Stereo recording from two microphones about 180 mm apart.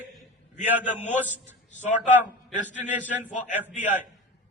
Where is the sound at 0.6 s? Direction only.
10° right (ahead or behind).